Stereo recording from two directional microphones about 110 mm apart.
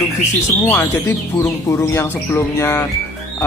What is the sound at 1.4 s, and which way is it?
Speech, 25° left (ahead or behind).